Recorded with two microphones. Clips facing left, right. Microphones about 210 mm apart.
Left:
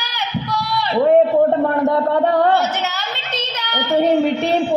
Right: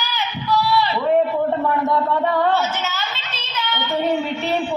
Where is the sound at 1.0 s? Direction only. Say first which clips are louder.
Left 9 dB; 45° left (ahead or behind).